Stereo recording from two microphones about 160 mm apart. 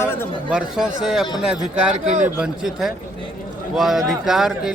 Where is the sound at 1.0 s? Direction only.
Centre (ahead or behind).